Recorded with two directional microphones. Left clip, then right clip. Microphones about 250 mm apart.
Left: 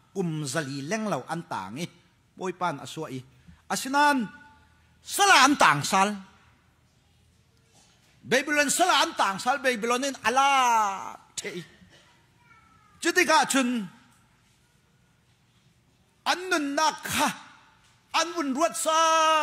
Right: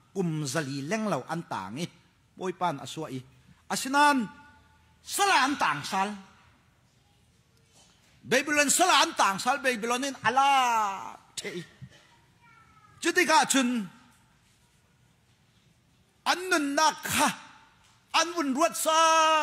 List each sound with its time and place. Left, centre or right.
0.1 s a man's voice: centre
5.0 s a woman's voice: centre
8.3 s a man's voice: centre
13.0 s a man's voice: centre
16.3 s a man's voice: centre